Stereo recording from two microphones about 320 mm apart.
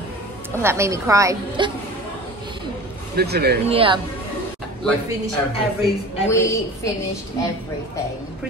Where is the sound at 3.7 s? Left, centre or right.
Centre.